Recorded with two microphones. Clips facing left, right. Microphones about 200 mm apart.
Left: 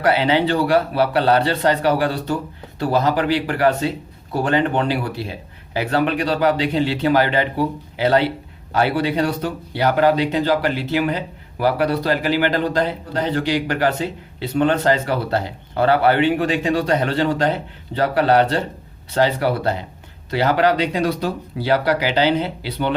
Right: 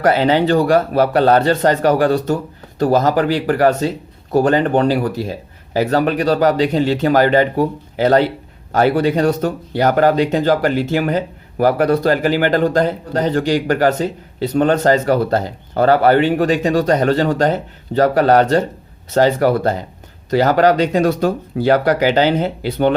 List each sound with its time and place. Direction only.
0.0 s speech: 45° right (ahead or behind)